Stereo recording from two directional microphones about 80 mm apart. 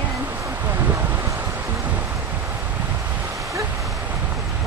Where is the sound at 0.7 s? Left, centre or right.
Right.